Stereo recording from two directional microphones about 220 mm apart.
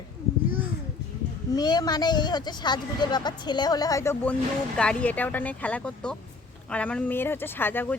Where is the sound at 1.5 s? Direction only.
20° left (ahead or behind).